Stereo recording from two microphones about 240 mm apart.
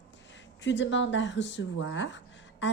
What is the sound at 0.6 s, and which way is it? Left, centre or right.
Speech, left.